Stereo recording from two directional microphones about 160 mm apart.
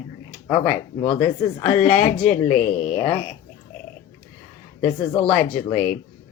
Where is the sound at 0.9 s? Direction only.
30° left (ahead or behind).